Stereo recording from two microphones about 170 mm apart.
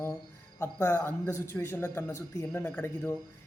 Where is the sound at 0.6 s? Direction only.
15° left (ahead or behind).